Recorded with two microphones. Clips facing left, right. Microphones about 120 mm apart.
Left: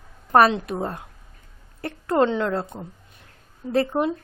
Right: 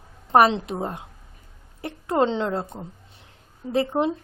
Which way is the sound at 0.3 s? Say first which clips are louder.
Even; 25° right (ahead or behind).